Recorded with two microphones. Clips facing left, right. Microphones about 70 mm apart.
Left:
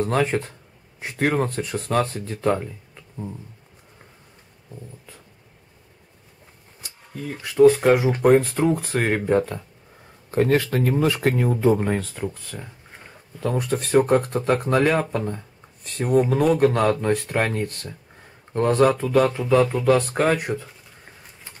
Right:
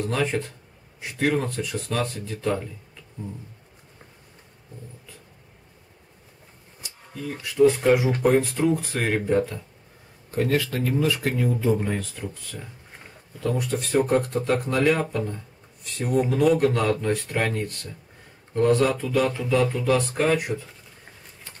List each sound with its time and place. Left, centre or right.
0.0 s speech: left
7.6 s speech: left
13.4 s speech: left